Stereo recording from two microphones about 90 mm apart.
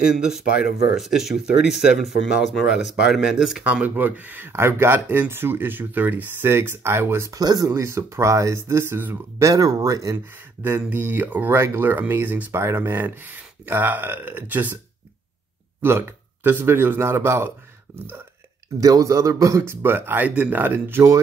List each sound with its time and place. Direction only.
0.2 s speech: 5° right (ahead or behind)
3.6 s speech: 15° right (ahead or behind)
7.3 s speech: 45° right (ahead or behind)
7.7 s speech: 30° right (ahead or behind)
10.6 s speech: 20° right (ahead or behind)
15.8 s speech: 25° right (ahead or behind)
18.8 s speech: 40° right (ahead or behind)